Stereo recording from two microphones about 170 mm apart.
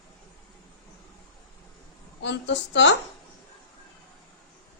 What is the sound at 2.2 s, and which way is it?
Speech, 90° left.